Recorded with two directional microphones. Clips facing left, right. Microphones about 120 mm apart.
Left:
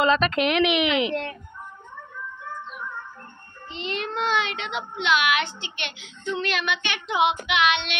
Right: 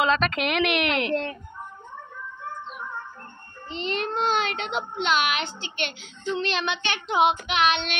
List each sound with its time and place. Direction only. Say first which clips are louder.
0.0 s a woman's voice: left 2 dB; centre (ahead or behind)
3.6 s a child's voice: right 2 dB; 40° right (ahead or behind)